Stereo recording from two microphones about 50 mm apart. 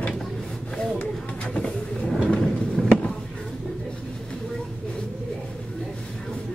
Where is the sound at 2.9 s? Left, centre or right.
Left.